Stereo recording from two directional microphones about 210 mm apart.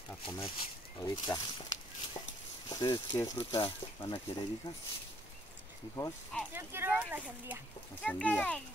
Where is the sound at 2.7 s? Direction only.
20° left (ahead or behind).